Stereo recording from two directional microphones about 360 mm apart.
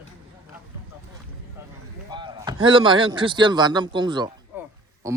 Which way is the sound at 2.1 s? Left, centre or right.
Centre.